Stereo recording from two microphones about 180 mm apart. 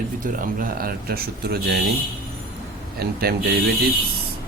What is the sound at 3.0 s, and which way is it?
Speech, 60° right (ahead or behind).